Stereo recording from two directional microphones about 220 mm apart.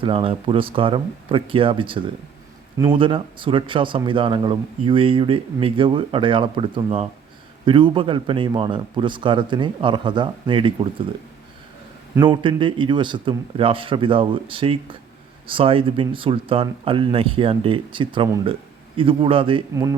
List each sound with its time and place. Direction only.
0.0 s speech: 25° right (ahead or behind)
12.1 s speech: 20° right (ahead or behind)